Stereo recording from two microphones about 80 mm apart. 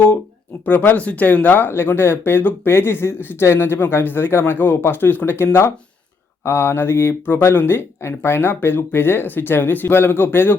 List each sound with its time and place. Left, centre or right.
0.6 s speech: left